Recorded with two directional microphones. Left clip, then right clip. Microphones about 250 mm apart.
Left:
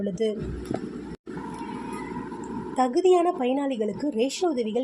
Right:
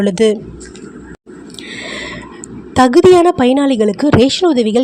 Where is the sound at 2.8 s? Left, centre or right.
Right.